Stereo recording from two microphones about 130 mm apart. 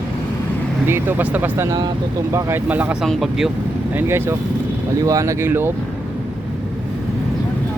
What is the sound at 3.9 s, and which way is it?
Speech, 20° right (ahead or behind).